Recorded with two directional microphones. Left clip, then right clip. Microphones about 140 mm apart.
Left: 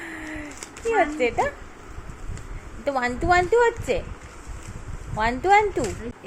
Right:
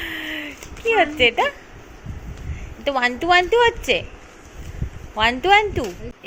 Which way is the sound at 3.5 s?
10° right (ahead or behind).